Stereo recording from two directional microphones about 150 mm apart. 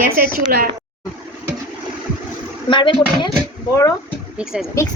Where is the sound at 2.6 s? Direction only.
35° left (ahead or behind).